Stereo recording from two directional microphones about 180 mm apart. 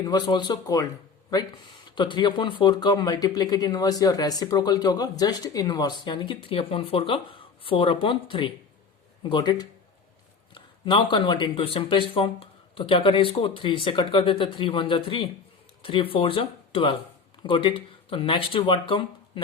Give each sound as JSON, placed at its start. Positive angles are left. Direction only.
{"t": 0.0, "sound": "speech", "side_deg": 20}
{"t": 2.0, "sound": "speech", "side_deg": 25}